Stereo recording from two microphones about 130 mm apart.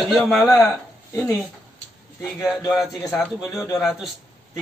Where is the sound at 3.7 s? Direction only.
Centre (ahead or behind).